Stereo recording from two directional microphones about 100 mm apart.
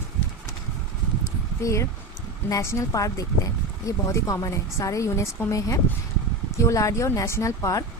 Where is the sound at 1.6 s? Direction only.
30° left (ahead or behind).